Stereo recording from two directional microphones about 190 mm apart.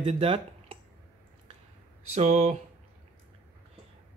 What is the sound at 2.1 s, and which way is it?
Speech, 35° right (ahead or behind).